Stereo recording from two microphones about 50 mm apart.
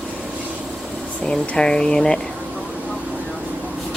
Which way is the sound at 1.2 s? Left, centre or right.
Centre.